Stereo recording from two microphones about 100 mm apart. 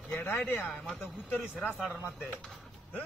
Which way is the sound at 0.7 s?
Centre (ahead or behind).